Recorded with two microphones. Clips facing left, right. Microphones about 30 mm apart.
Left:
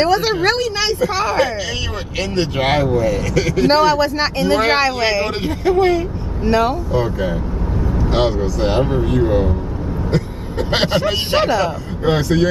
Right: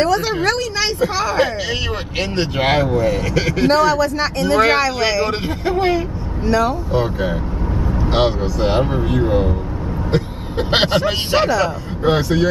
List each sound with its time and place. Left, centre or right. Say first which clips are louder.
0.0 s a man's voice: left 2 dB; centre
2.5 s speech: even; centre
3.6 s a man's voice: left 1 dB; centre
5.0 s a man's voice: even; centre
5.7 s speech: left 3 dB; centre
6.4 s a man's voice: left 1 dB; centre
6.9 s speech: even; centre
10.1 s vehicle: right 2 dB; right
10.9 s speech: even; centre
11.3 s a man's voice: even; centre
11.6 s speech: right 1 dB; centre